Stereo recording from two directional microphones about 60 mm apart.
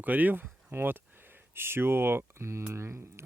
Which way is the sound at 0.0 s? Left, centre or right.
Right.